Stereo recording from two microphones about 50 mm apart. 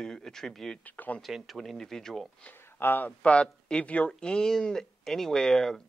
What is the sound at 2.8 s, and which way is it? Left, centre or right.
Speech, left.